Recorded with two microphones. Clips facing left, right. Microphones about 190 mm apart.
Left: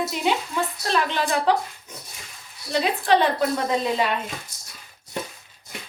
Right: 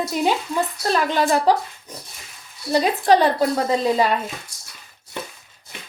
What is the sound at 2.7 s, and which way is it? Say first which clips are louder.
Speech: right 4 dB; 40° right (ahead or behind).